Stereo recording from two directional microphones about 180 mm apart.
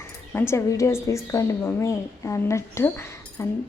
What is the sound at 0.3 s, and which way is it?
A woman's voice, 15° left (ahead or behind).